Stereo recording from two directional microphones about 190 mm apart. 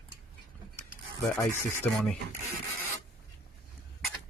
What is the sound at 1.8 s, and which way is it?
Speech, 5° left (ahead or behind).